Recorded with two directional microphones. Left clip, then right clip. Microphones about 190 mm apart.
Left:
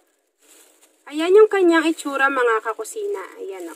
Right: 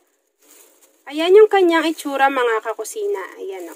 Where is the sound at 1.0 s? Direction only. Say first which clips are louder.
Right 2 dB; 15° right (ahead or behind).